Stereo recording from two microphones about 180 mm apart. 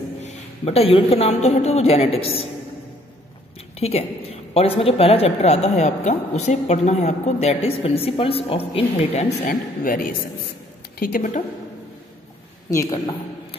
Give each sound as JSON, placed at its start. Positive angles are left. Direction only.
{"t": 0.2, "sound": "a woman's voice", "side_deg": 35}
{"t": 3.7, "sound": "a woman's voice", "side_deg": 35}
{"t": 11.0, "sound": "a woman's voice", "side_deg": 50}
{"t": 12.7, "sound": "a man's voice", "side_deg": 20}